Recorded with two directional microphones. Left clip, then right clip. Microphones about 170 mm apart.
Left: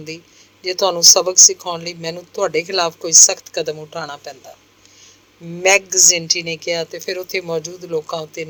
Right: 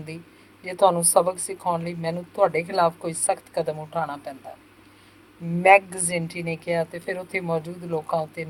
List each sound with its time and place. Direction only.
0.6 s speech: 50° left (ahead or behind)
5.6 s speech: 50° left (ahead or behind)